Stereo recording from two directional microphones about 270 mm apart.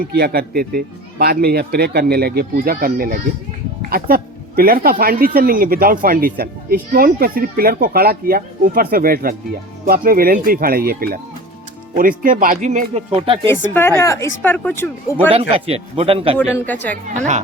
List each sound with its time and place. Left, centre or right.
0.0 s speech: right
13.7 s speech: centre
15.3 s speech: right